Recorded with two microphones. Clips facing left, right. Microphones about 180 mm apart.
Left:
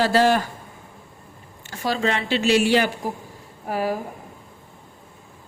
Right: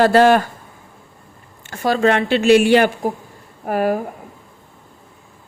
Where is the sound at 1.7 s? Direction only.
55° right (ahead or behind).